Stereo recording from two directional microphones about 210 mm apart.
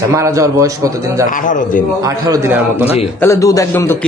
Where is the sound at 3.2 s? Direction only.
15° left (ahead or behind).